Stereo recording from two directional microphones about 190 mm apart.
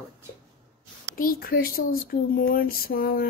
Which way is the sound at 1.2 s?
50° left (ahead or behind).